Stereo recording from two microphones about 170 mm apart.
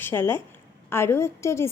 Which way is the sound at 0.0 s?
15° left (ahead or behind).